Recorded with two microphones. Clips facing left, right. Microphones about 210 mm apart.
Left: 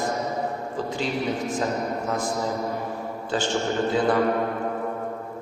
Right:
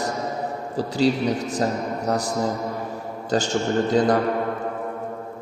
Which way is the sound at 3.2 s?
40° right (ahead or behind).